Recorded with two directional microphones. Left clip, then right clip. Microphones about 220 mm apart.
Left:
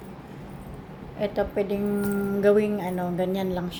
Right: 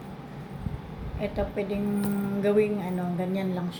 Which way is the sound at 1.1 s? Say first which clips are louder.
Left 4 dB; 45° left (ahead or behind).